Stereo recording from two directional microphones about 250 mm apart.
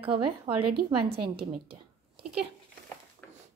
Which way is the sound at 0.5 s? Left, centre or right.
Right.